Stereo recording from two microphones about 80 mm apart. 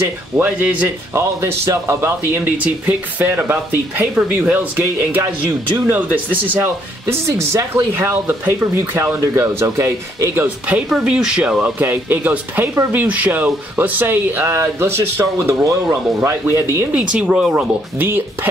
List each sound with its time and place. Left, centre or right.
0.4 s speech: centre
1.1 s speech: right
2.5 s speech: right
7.9 s speech: right
10.9 s speech: centre; by 16.6 s right
16.9 s speech: centre